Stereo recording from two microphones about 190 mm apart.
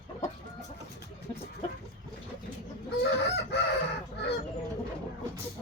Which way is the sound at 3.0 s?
60° left (ahead or behind).